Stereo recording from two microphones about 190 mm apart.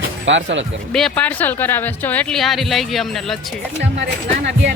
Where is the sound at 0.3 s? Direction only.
80° right.